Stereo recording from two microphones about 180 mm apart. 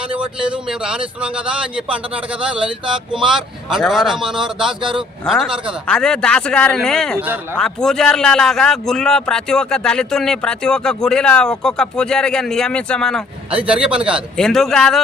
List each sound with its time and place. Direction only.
0.1 s a man's voice: 30° right (ahead or behind)
0.5 s a man's voice: 5° right (ahead or behind)